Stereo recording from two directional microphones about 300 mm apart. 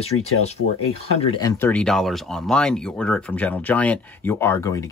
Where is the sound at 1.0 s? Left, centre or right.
Centre.